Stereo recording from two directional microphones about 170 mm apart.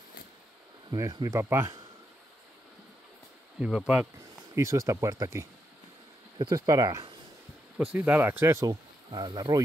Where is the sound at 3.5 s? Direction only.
5° right (ahead or behind).